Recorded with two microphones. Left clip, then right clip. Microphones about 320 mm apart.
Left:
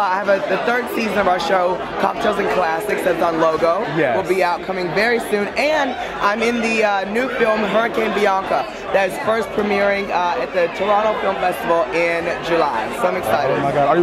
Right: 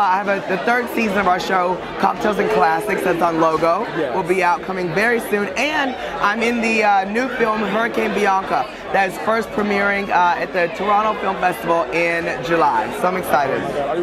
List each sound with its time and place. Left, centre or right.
0.0 s speech: right